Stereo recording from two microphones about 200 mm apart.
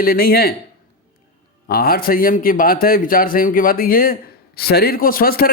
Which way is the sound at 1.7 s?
50° left (ahead or behind).